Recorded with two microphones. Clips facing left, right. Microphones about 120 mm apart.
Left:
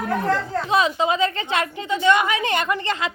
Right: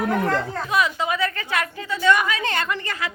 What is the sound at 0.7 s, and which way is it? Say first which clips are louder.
A woman's voice: left 3 dB; 25° left (ahead or behind).